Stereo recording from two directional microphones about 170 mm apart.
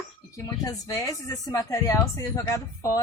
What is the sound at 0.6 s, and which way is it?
Speech, 20° left (ahead or behind).